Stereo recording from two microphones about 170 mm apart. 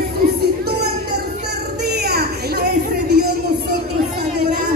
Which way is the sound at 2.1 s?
65° right (ahead or behind).